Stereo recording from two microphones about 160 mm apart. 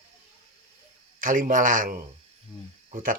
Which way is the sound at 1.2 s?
55° right (ahead or behind).